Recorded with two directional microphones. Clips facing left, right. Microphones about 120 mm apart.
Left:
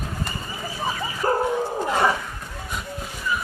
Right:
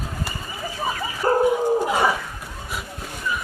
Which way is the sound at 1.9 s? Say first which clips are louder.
Even; 5° right (ahead or behind).